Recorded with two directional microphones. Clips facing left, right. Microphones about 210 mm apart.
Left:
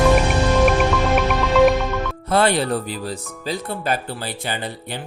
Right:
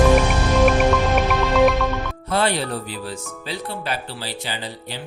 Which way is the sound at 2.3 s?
50° left (ahead or behind).